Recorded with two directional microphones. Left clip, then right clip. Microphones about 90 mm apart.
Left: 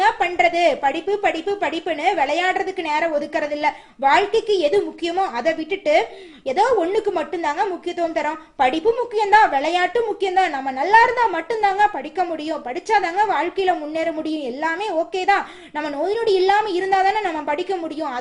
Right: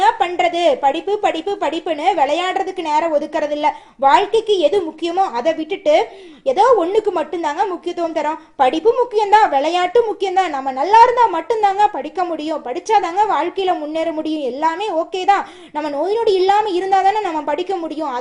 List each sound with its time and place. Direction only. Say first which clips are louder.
0.0 s speech: right 2 dB; 35° right (ahead or behind)